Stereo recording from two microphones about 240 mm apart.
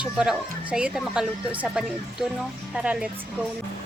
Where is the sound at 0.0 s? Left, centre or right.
Centre.